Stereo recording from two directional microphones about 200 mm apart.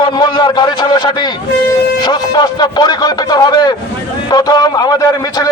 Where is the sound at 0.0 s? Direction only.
20° left (ahead or behind).